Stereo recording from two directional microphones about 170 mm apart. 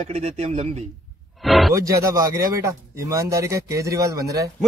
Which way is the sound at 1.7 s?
20° right (ahead or behind).